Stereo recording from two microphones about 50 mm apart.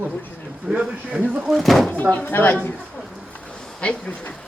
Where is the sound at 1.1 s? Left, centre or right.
Right.